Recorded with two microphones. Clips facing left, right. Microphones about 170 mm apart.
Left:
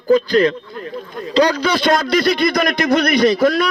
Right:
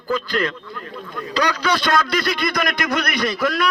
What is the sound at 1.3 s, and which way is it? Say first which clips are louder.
A man's voice: left 6 dB; 30° left (ahead or behind).